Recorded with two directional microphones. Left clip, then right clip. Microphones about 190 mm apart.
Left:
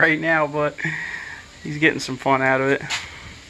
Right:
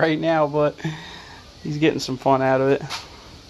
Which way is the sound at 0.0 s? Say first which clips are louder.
Left 1 dB; 20° right (ahead or behind).